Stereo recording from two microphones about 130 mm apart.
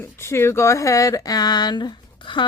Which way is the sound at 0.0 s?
20° left (ahead or behind).